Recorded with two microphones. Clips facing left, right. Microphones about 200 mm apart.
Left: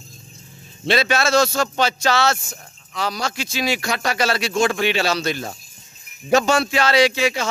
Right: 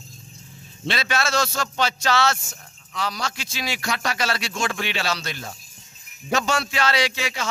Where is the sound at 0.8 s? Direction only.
35° left (ahead or behind).